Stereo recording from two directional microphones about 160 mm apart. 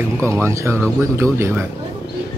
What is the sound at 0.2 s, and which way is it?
Speech, 20° right (ahead or behind).